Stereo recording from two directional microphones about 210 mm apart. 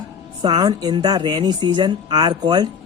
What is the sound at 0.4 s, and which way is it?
A woman's voice, 20° right (ahead or behind).